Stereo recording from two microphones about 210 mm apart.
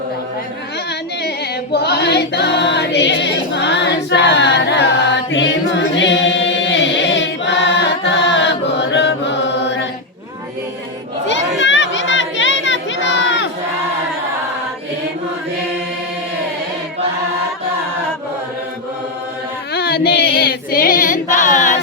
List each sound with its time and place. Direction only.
1.7 s choir: 50° left (ahead or behind)
11.3 s a sound: 60° left (ahead or behind)
19.7 s female singing: 50° left (ahead or behind)